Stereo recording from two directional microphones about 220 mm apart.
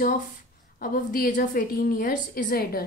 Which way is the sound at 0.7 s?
40° left (ahead or behind).